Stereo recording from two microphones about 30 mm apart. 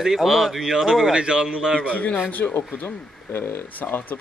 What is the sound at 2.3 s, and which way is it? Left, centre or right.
Speech, left.